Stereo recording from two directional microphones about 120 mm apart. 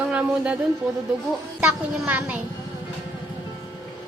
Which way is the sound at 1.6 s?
10° right (ahead or behind).